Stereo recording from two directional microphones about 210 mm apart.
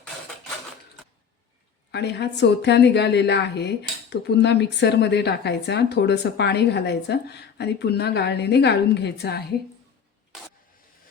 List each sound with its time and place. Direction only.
1.9 s speech: 55° left (ahead or behind)